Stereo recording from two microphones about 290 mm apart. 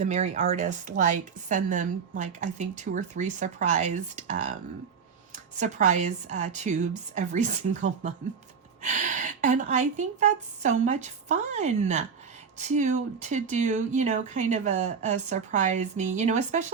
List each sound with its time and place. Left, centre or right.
0.0 s a woman's voice: right